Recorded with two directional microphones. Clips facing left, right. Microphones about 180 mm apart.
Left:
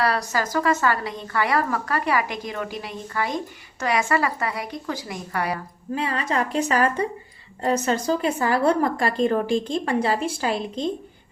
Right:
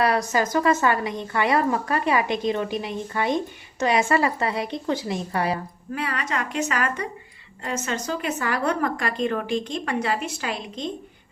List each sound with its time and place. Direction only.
0.0 s a woman's voice: 20° right (ahead or behind)
5.9 s a woman's voice: 25° left (ahead or behind)